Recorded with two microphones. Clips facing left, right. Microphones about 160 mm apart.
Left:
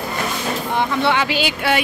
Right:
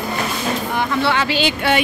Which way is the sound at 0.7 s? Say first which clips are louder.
Left 2 dB; 20° left (ahead or behind).